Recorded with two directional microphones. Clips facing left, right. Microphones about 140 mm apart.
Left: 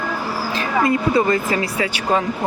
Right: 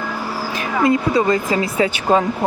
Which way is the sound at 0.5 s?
15° right (ahead or behind).